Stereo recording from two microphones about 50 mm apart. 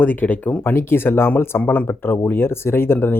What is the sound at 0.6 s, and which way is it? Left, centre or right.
Speech, left.